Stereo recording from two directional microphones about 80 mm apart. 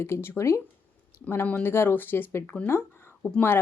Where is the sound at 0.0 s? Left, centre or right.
Left.